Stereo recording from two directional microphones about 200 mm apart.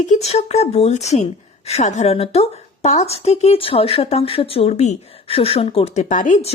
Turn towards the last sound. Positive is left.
turn(degrees=35)  # may be behind; listen again after turning